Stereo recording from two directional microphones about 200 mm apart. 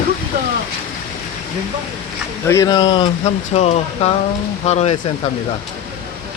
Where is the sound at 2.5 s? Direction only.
15° left (ahead or behind); by 4.9 s 35° left (ahead or behind).